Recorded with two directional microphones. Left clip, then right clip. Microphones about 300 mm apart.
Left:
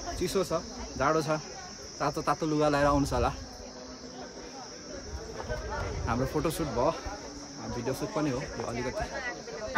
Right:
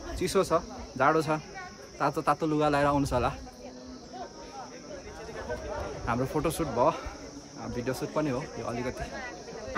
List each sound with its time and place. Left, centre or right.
0.2 s speech: centre
6.0 s speech: centre